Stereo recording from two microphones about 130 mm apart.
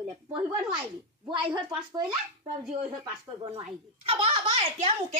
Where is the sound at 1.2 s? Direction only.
35° right (ahead or behind).